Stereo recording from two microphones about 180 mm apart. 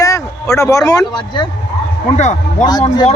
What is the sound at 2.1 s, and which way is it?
Speech, 40° left (ahead or behind).